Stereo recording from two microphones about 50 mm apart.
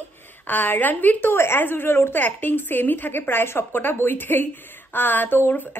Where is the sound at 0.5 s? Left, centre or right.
Left.